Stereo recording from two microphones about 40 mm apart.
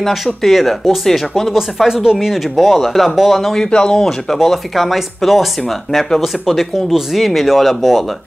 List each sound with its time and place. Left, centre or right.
0.0 s speech: centre
1.5 s speech: centre
3.5 s speech: centre
4.0 s speech: centre